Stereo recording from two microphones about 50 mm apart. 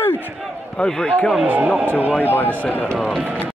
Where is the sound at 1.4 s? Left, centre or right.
Right.